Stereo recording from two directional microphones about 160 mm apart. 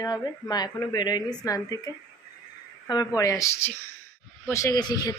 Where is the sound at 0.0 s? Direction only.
25° left (ahead or behind).